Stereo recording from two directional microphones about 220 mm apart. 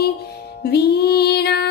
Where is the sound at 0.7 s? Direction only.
45° left (ahead or behind).